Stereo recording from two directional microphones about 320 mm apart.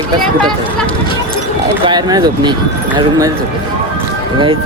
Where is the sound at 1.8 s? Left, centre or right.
Centre.